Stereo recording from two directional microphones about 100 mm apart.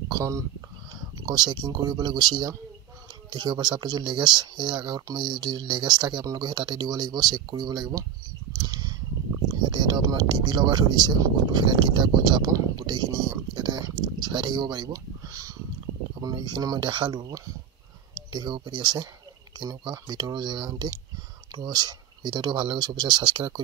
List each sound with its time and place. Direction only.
0.1 s speech: 30° right (ahead or behind)
1.2 s speech: 50° right (ahead or behind)
8.5 s a sound: 40° right (ahead or behind)
10.0 s speech: 45° right (ahead or behind)
12.4 s speech: 35° right (ahead or behind)
16.2 s speech: 45° right (ahead or behind)
17.1 s speech: 35° right (ahead or behind)
18.1 s speech: 50° right (ahead or behind)